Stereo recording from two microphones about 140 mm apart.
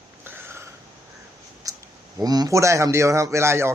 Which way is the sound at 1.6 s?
25° right (ahead or behind).